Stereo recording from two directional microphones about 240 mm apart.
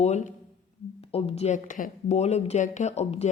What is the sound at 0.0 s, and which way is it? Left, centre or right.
Speech, left.